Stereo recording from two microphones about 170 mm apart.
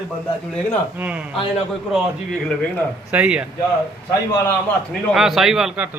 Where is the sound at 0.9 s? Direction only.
10° right (ahead or behind).